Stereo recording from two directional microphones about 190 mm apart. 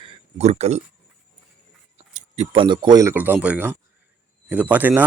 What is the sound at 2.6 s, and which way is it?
Speech, 25° right (ahead or behind).